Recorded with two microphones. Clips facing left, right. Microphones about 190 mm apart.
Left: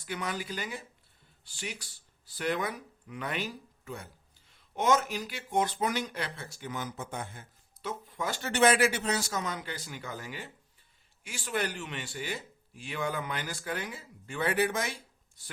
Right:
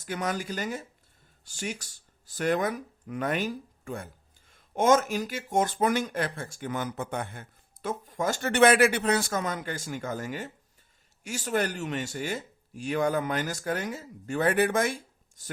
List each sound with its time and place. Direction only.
0.0 s a woman's voice: 45° right (ahead or behind)